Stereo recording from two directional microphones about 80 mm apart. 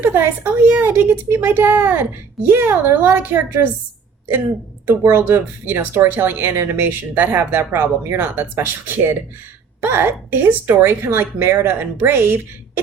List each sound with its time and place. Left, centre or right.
0.0 s speech: right
4.9 s speech: right